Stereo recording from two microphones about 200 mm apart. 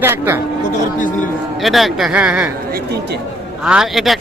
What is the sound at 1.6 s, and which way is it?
Speech, centre (ahead or behind).